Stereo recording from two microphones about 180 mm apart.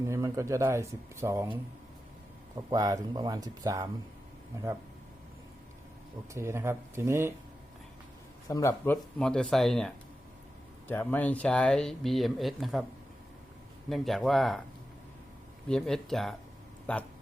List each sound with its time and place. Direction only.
0.0 s speech: 15° right (ahead or behind)
2.6 s speech: 20° right (ahead or behind)
6.3 s speech: 15° right (ahead or behind)
8.4 s speech: 15° left (ahead or behind); by 12.8 s centre (ahead or behind)
13.9 s speech: centre (ahead or behind)
15.7 s speech: centre (ahead or behind)